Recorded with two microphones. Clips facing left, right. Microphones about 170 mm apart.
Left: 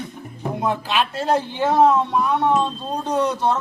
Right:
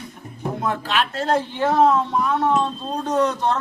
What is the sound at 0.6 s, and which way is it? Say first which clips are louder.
A man's voice: left 2 dB; 15° left (ahead or behind).